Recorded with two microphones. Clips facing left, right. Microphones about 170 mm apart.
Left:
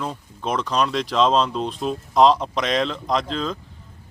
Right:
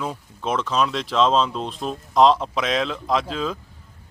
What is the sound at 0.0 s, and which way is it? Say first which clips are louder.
Speech: even; 5° right (ahead or behind).